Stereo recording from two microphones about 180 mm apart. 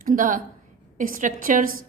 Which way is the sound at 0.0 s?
50° right (ahead or behind).